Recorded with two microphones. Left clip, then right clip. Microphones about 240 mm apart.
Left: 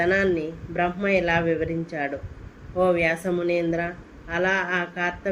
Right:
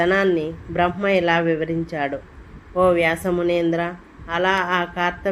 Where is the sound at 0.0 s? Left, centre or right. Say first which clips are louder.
Right 3 dB; right.